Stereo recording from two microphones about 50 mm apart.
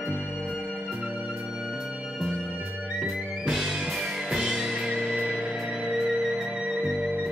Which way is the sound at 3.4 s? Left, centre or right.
Centre.